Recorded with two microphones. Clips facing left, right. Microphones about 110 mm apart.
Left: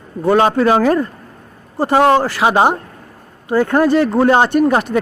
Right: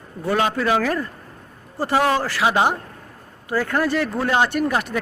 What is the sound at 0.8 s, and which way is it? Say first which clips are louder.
Speech: left 9 dB; 30° left (ahead or behind).